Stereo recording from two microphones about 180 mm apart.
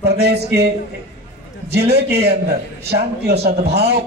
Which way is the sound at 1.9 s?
65° right (ahead or behind).